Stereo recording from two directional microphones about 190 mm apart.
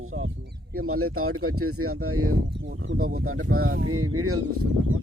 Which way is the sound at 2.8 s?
75° right (ahead or behind).